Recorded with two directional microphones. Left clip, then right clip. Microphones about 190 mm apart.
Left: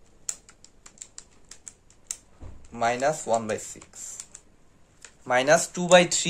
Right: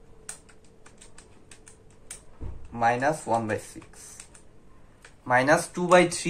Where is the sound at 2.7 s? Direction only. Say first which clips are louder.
Right 1 dB; 65° left (ahead or behind).